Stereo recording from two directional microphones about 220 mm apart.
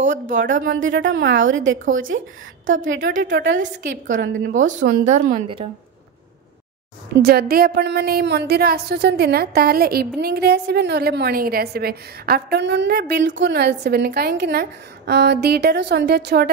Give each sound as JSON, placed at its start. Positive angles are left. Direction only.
{"t": 0.0, "sound": "speech", "side_deg": -35}
{"t": 0.7, "sound": "a woman's voice", "side_deg": -60}
{"t": 4.5, "sound": "speech", "side_deg": -35}
{"t": 7.2, "sound": "a woman's voice", "side_deg": -45}